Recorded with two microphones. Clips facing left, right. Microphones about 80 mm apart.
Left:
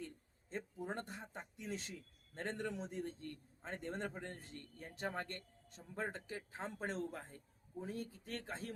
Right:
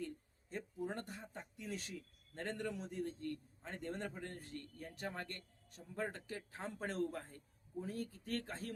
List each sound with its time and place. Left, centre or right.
0.5 s speech: left